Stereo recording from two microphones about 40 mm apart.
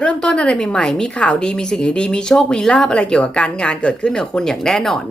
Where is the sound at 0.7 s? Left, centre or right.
Centre.